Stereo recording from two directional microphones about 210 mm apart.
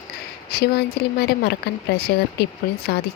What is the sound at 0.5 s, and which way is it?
Speech, 50° left (ahead or behind).